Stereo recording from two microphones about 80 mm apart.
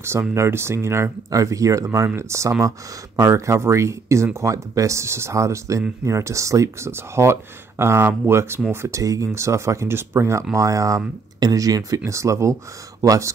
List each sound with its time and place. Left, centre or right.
0.3 s speech: right
1.3 s speech: right
8.8 s speech: right
11.3 s speech: right